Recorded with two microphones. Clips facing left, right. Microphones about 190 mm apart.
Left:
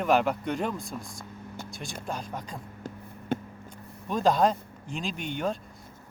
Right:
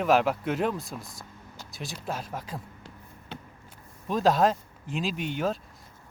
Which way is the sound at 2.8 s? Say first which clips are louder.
Left 12 dB; 45° left (ahead or behind).